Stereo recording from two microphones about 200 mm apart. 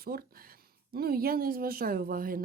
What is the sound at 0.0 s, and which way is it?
Speech, 50° right (ahead or behind).